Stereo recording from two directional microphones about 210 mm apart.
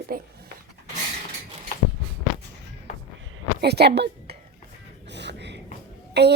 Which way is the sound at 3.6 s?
50° right (ahead or behind).